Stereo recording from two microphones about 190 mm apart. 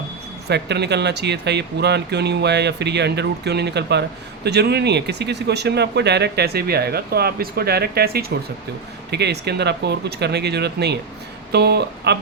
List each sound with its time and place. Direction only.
0.4 s speech: 60° right (ahead or behind)